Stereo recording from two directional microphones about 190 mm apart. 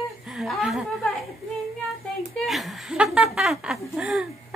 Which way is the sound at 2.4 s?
Centre (ahead or behind).